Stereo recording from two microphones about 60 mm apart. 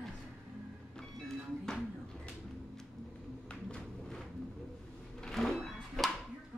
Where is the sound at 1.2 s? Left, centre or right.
Centre.